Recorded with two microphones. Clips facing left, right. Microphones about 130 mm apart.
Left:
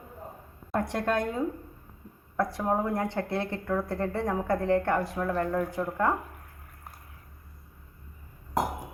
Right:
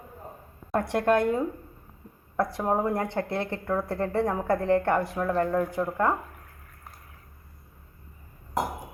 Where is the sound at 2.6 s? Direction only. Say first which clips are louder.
Right 2 dB; 15° right (ahead or behind).